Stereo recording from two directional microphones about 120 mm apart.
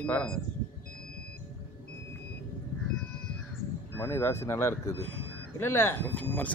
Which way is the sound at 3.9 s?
20° left (ahead or behind).